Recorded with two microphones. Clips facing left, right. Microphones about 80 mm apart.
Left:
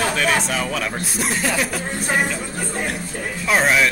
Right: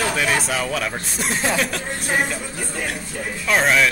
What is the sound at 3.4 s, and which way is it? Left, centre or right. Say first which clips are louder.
Speech: even; centre.